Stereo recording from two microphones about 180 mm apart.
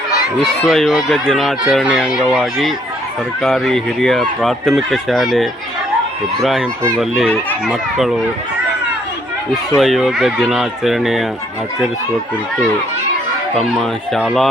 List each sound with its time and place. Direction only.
0.7 s speech: centre (ahead or behind)
7.7 s speech: centre (ahead or behind)
9.7 s speech: centre (ahead or behind)
13.6 s speech: centre (ahead or behind)